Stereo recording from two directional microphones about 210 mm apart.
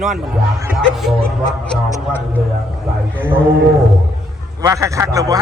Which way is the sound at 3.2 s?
10° right (ahead or behind).